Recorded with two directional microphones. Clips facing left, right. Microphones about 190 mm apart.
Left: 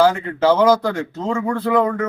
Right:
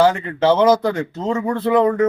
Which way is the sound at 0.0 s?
Centre (ahead or behind).